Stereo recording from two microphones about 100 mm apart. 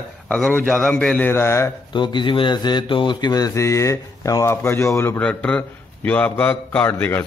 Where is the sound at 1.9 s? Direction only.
50° left (ahead or behind); by 5.2 s 25° left (ahead or behind).